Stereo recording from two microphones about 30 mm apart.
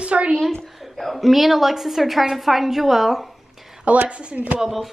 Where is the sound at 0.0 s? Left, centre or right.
Right.